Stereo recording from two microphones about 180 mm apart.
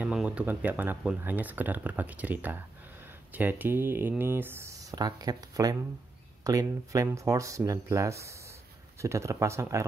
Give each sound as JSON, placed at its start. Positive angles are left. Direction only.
{"t": 0.0, "sound": "speech", "side_deg": -5}